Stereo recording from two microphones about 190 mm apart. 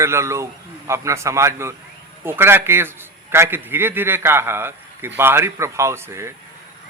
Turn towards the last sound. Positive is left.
turn(degrees=-15)  # may be behind; listen again after turning